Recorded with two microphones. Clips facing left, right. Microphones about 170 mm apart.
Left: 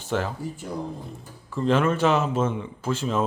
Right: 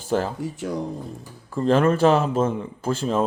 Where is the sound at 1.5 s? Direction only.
40° right (ahead or behind).